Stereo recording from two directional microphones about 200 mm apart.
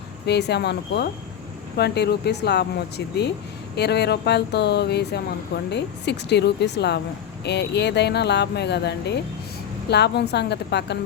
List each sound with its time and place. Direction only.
0.3 s speech: 55° left (ahead or behind)